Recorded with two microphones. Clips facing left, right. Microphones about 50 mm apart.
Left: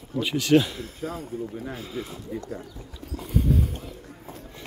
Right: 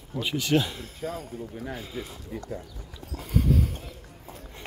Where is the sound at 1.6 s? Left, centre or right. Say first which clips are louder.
Left 2 dB; centre.